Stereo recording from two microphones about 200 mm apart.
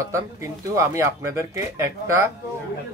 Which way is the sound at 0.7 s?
15° right (ahead or behind).